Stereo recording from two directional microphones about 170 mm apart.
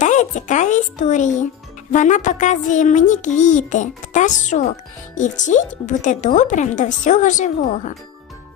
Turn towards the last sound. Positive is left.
turn(degrees=45)  # may be behind; listen again after turning